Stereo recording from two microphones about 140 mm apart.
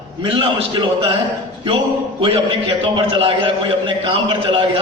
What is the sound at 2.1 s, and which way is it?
A man's voice, 40° right (ahead or behind).